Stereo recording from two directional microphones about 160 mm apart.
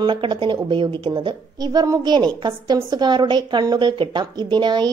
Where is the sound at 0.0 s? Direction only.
30° right (ahead or behind).